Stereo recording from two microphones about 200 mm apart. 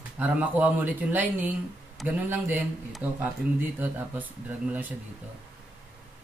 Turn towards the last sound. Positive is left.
turn(degrees=-10)  # may be behind; listen again after turning